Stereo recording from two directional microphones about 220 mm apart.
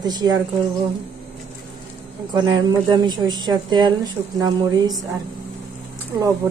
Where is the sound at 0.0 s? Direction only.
20° right (ahead or behind).